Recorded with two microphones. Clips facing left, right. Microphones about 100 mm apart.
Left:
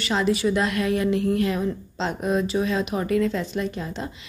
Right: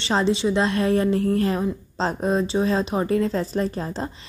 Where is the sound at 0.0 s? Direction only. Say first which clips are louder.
Right 1 dB; 30° right (ahead or behind).